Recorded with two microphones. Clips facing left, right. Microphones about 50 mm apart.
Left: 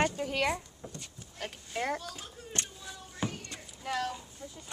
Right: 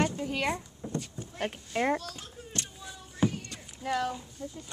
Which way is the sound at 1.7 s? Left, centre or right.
Right.